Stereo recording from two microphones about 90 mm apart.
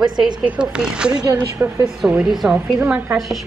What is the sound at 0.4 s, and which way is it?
A woman's voice, 10° right (ahead or behind).